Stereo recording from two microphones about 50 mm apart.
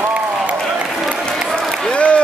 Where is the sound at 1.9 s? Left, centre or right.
Left.